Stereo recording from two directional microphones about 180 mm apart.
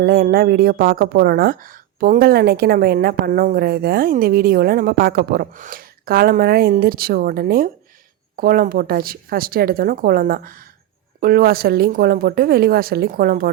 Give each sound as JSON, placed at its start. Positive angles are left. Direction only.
{"t": 0.0, "sound": "a woman's voice", "side_deg": -60}